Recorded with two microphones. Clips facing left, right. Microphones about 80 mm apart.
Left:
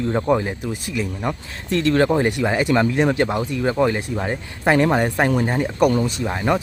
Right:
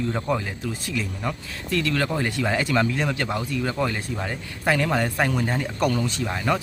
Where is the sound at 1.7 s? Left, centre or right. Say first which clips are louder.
Left 7 dB; left.